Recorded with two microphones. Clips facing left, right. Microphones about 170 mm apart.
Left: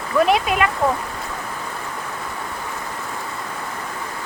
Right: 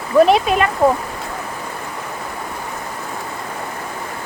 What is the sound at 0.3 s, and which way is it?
Speech, 30° right (ahead or behind).